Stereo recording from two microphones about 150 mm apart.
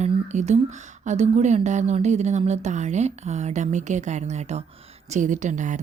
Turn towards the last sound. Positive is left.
turn(degrees=-55)  # may be behind; listen again after turning